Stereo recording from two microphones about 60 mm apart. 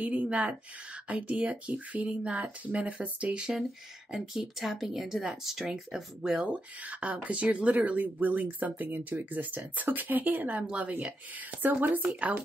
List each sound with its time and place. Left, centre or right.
0.0 s speech: right